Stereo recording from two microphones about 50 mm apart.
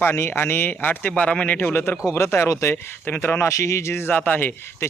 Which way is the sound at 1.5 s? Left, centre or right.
Left.